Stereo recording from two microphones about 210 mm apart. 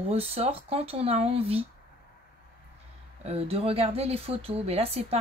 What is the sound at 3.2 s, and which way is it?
A woman's voice, 30° right (ahead or behind).